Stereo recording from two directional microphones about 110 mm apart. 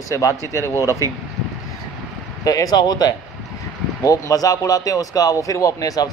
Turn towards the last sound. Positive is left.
turn(degrees=35)  # may be behind; listen again after turning